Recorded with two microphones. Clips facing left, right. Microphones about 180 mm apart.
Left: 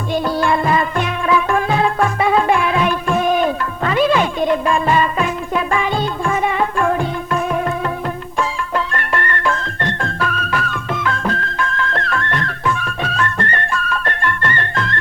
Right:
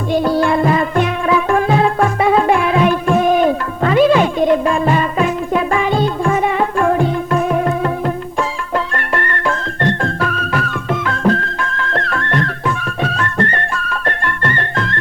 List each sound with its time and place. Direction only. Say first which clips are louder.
0.3 s music: right 2 dB; 40° right (ahead or behind)
9.0 s music: right 1 dB; 40° right (ahead or behind)